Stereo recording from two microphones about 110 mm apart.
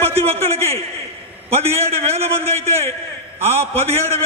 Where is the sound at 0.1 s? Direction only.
65° right (ahead or behind).